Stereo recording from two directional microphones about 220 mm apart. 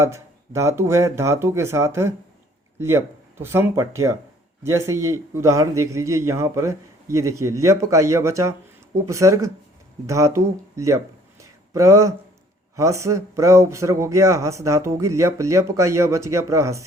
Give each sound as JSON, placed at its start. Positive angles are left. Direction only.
{"t": 0.0, "sound": "speech", "side_deg": -15}